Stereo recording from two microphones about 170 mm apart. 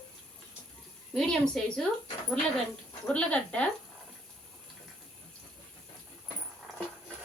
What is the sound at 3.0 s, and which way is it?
Speech, 5° left (ahead or behind).